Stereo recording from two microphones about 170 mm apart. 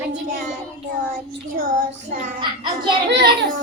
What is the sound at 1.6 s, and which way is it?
Child singing, 55° right (ahead or behind).